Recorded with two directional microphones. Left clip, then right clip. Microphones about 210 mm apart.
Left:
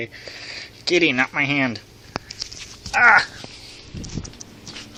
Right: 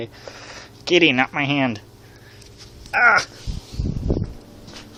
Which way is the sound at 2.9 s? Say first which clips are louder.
Left 2 dB; 60° right (ahead or behind).